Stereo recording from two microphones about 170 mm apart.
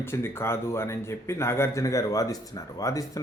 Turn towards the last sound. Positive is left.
turn(degrees=20)  # may be behind; listen again after turning